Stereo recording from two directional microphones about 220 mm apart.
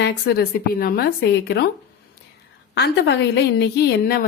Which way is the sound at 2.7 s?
50° left (ahead or behind).